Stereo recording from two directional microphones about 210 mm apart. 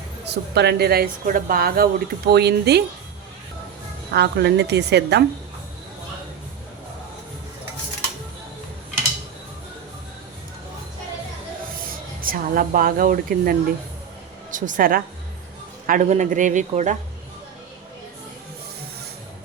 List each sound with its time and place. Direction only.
0.5 s speech: 50° right (ahead or behind)
4.1 s speech: 50° right (ahead or behind)
12.2 s speech: 40° right (ahead or behind)